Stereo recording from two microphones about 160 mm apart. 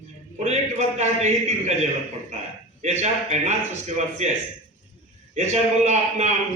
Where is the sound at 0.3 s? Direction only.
45° right (ahead or behind).